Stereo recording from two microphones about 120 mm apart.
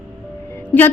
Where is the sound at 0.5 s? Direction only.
15° left (ahead or behind).